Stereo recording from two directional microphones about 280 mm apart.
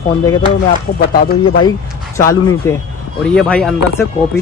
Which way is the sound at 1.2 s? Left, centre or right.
Left.